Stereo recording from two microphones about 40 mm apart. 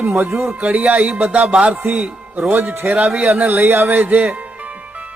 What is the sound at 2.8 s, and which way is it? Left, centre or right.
Music, right.